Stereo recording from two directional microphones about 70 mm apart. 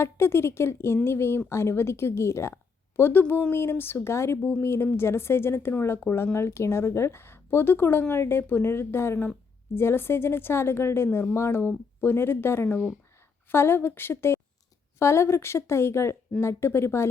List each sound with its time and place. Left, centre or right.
0.0 s speech: left